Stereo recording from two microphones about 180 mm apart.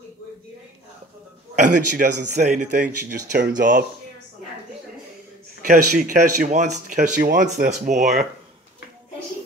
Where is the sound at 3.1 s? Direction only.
55° right (ahead or behind).